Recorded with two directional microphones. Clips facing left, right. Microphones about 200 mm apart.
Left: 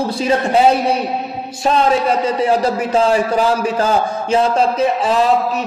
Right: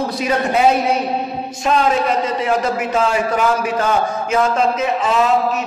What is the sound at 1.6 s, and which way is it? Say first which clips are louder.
A man's voice: left 2 dB; 35° left (ahead or behind).